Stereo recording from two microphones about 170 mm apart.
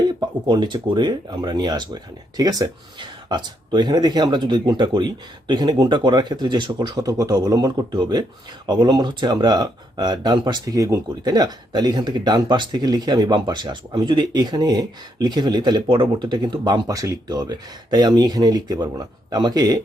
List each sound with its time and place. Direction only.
0.1 s speech: 25° right (ahead or behind)